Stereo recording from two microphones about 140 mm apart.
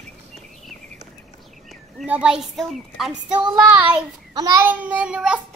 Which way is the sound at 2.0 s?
10° right (ahead or behind).